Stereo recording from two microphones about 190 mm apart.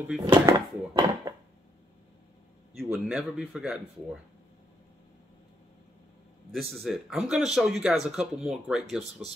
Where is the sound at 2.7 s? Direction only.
Centre (ahead or behind).